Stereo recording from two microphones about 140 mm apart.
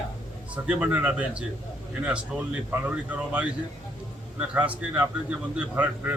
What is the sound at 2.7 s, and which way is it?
Speech, 10° right (ahead or behind).